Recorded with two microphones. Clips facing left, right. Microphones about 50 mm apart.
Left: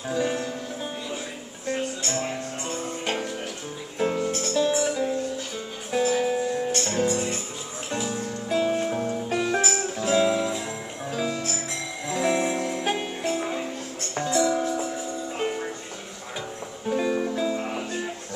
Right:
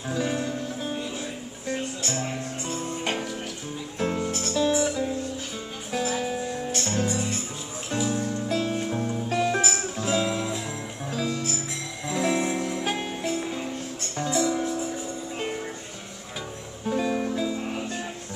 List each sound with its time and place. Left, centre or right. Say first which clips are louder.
0.1 s music: left 1 dB; centre
3.0 s music: left 1 dB; centre
12.1 s jingle bell: left 1 dB; centre
12.8 s music: left 2 dB; centre
16.8 s music: left 1 dB; centre
17.6 s music: left 1 dB; left